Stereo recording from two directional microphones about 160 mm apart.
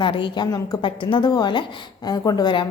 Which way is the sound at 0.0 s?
30° left (ahead or behind).